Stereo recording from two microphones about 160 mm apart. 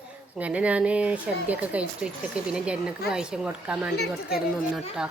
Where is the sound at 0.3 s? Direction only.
10° right (ahead or behind).